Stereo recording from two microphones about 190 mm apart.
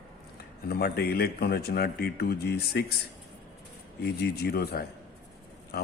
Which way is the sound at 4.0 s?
55° left (ahead or behind).